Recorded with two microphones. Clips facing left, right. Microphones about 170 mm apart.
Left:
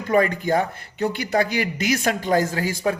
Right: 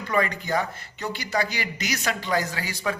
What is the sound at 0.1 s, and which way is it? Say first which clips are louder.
A man's voice: left 6 dB; 50° left (ahead or behind).